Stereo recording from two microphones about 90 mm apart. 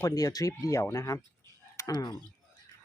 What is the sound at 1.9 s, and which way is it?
Speech, 50° left (ahead or behind).